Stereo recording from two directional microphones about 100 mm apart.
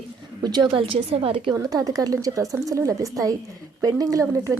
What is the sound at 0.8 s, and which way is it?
Speech, 70° right (ahead or behind).